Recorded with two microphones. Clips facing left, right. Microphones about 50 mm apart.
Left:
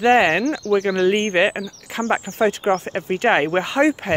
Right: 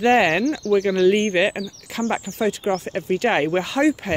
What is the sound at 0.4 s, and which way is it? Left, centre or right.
Speech, left.